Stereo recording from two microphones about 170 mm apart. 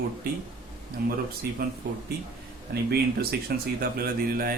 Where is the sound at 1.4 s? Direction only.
70° right (ahead or behind).